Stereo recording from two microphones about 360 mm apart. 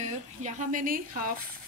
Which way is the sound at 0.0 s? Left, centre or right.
Centre.